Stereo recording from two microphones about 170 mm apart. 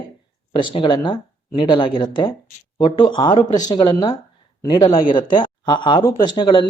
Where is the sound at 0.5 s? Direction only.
30° left (ahead or behind).